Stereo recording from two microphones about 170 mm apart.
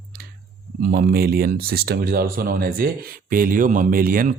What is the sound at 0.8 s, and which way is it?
Speech, 60° right (ahead or behind).